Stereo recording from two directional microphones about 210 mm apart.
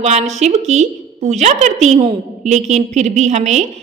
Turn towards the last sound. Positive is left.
turn(degrees=-35)  # may be behind; listen again after turning